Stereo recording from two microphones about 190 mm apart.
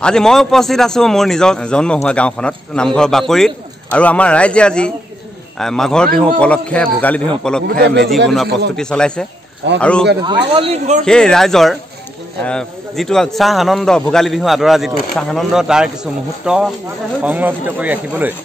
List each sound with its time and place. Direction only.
0.0 s a man's voice: 5° left (ahead or behind)
7.6 s a man's voice: 60° right (ahead or behind)
8.7 s a man's voice: 5° left (ahead or behind)
10.2 s speech: 30° right (ahead or behind)
11.1 s a man's voice: 5° left (ahead or behind)